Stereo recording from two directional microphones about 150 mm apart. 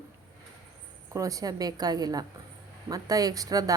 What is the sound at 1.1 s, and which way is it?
A woman's voice, 20° right (ahead or behind).